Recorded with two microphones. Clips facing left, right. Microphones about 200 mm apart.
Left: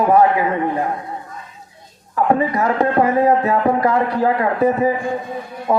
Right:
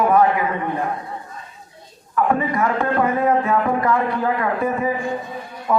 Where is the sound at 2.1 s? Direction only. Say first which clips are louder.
Left 2 dB; 35° left (ahead or behind).